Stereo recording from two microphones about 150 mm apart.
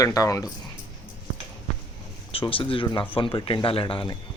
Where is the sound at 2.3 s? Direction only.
35° left (ahead or behind).